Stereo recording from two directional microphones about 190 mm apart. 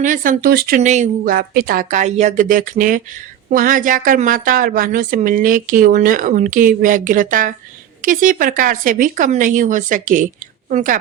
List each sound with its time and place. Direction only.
0.0 s a woman's voice: 45° right (ahead or behind)
0.8 s a woman's voice: 40° right (ahead or behind)